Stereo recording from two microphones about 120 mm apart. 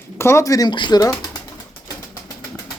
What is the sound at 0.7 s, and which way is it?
Speech, 40° left (ahead or behind).